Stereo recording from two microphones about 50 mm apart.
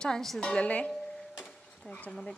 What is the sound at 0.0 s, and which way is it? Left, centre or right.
Speech, centre.